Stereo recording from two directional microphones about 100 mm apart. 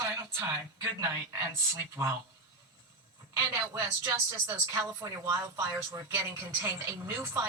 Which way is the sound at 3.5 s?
25° right (ahead or behind).